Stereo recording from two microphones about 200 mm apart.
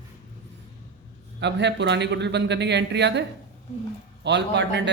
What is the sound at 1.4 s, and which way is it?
A man's voice, 60° right (ahead or behind).